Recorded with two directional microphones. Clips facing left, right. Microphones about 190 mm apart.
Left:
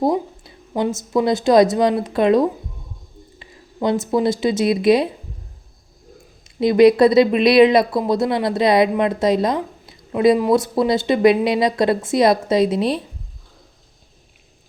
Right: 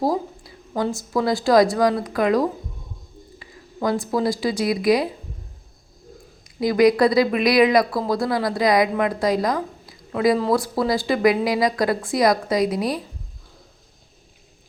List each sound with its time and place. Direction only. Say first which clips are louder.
0.0 s a sound: left 3 dB; 20° left (ahead or behind)
0.8 s speech: left 3 dB; 20° left (ahead or behind)
6.4 s speech: left 4 dB; 25° left (ahead or behind)